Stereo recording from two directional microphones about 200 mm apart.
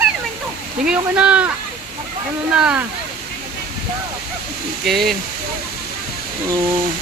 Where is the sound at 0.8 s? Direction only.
5° right (ahead or behind).